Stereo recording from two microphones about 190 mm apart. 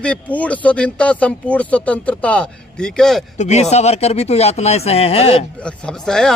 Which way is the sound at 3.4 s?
35° left (ahead or behind).